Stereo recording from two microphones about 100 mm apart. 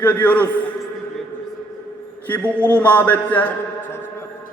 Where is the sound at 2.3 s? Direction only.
15° left (ahead or behind).